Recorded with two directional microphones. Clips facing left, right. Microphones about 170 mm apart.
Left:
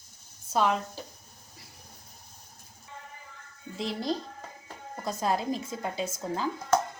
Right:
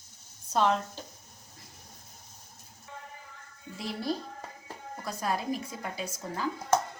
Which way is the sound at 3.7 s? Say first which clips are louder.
Left 2 dB; 20° left (ahead or behind).